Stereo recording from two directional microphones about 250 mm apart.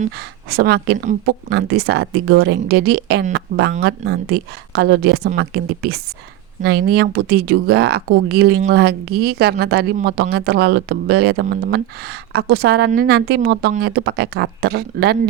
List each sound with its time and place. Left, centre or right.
0.5 s speech: right